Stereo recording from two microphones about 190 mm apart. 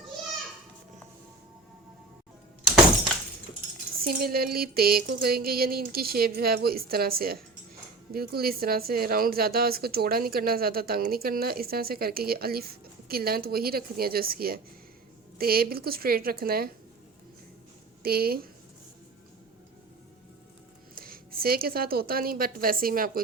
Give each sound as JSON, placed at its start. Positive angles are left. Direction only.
{"t": 4.0, "sound": "speech", "side_deg": -50}
{"t": 18.0, "sound": "speech", "side_deg": -55}
{"t": 20.9, "sound": "a woman's voice", "side_deg": -50}